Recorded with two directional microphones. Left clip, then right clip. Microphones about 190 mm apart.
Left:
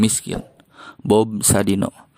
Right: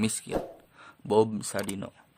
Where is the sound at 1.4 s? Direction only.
40° left (ahead or behind).